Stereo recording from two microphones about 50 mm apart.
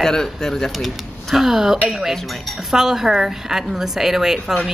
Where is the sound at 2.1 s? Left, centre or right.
Centre.